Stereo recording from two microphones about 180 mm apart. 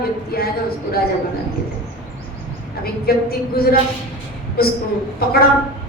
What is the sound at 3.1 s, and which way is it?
Speech, 60° left (ahead or behind).